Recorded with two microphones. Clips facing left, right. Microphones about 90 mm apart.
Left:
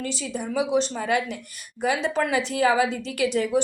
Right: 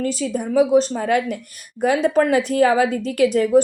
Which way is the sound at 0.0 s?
45° right (ahead or behind).